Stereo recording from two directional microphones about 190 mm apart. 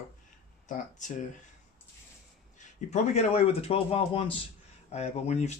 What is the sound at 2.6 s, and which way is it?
Speech, 35° left (ahead or behind).